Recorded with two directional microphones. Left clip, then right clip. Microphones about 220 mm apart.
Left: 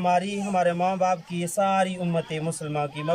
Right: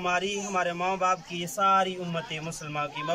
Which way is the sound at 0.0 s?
25° left (ahead or behind).